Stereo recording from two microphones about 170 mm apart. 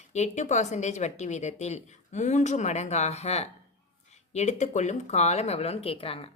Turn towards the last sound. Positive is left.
turn(degrees=35)  # may be behind; listen again after turning